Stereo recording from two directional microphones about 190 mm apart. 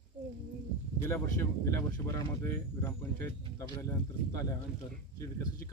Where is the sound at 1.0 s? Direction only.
15° left (ahead or behind).